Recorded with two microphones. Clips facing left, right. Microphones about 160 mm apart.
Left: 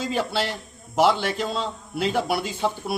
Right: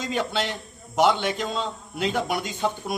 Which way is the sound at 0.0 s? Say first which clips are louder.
Left 1 dB; 5° left (ahead or behind).